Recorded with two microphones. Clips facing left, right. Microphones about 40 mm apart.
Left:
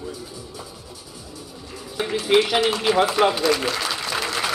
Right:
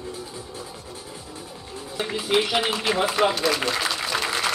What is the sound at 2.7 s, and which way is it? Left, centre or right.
A man's voice, centre.